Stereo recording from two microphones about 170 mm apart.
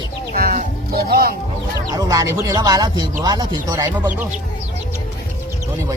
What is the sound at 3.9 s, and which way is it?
Speech, 10° right (ahead or behind).